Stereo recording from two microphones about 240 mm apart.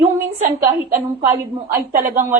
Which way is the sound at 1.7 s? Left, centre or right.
Right.